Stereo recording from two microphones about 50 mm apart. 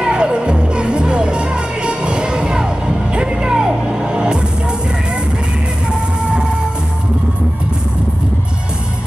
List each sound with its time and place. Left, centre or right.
0.0 s music: centre